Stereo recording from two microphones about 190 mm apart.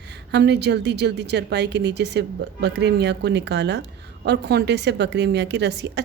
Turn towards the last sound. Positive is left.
turn(degrees=-65)  # may be behind; listen again after turning